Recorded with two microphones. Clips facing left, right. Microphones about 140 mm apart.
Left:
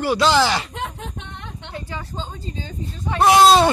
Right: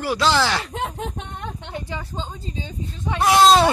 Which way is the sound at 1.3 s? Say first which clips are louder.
Right 4 dB; 45° right (ahead or behind).